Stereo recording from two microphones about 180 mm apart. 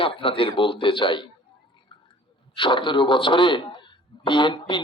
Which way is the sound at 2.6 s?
25° left (ahead or behind).